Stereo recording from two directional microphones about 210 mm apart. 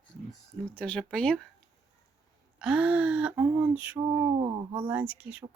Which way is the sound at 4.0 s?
20° right (ahead or behind).